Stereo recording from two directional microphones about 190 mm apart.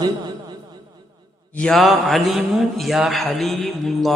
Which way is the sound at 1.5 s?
5° left (ahead or behind).